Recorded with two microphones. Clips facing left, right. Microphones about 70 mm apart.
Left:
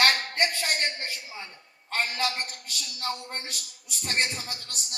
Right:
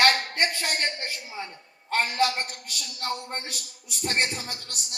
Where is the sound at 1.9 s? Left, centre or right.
Right.